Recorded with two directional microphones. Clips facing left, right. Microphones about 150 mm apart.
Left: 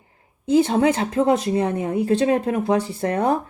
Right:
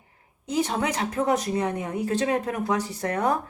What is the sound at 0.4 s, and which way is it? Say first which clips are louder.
Speech: left 9 dB; 30° left (ahead or behind).